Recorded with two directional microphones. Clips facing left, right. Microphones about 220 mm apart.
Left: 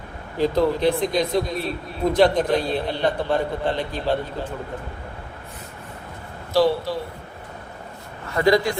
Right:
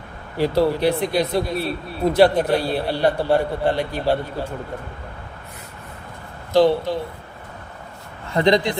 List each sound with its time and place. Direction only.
0.3 s a man's voice: 10° right (ahead or behind)
6.5 s speech: 20° right (ahead or behind)
8.3 s speech: 25° right (ahead or behind)